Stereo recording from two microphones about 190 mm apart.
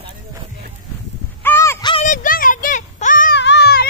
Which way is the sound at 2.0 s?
45° left (ahead or behind).